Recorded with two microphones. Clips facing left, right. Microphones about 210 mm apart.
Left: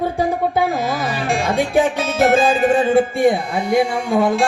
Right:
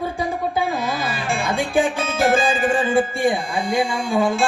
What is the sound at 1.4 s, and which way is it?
Music, 65° left (ahead or behind).